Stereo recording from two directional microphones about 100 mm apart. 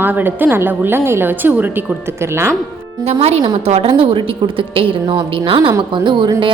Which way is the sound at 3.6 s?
75° right (ahead or behind).